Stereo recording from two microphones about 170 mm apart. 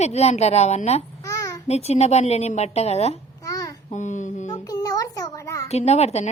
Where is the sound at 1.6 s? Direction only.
40° left (ahead or behind).